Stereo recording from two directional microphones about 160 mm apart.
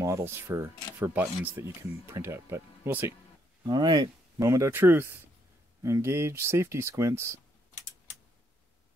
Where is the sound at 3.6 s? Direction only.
25° right (ahead or behind).